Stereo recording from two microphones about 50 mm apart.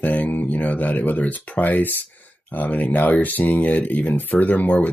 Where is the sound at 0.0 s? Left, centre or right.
Left.